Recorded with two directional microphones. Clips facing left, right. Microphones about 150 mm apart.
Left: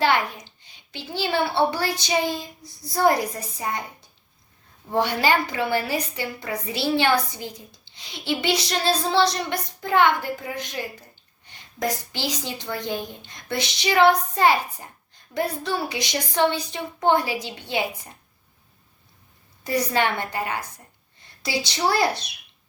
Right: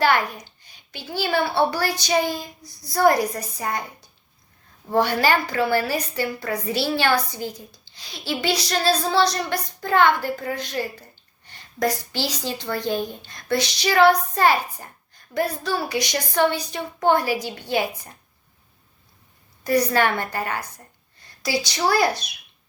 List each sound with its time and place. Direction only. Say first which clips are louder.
0.0 s a woman's voice: right 1 dB; 25° left (ahead or behind)
4.9 s a woman's voice: right 2 dB; 20° left (ahead or behind)
19.6 s a woman's voice: right 3 dB; 20° left (ahead or behind)